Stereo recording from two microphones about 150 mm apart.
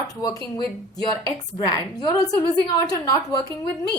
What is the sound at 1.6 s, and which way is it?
A woman's voice, 25° left (ahead or behind).